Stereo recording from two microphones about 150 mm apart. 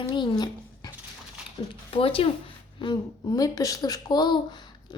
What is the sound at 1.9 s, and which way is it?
A woman's voice, 35° left (ahead or behind).